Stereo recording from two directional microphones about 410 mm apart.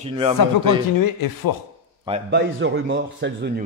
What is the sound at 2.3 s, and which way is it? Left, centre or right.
A man's voice, right.